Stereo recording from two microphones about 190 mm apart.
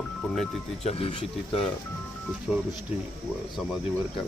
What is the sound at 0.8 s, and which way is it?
Speech, 30° left (ahead or behind).